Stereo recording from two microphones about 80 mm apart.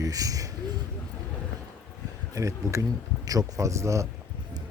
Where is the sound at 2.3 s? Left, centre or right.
Right.